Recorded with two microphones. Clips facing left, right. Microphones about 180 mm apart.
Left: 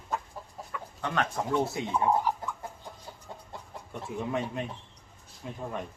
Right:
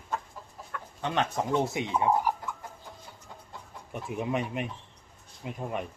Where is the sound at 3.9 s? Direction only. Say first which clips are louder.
Right 2 dB; 15° right (ahead or behind).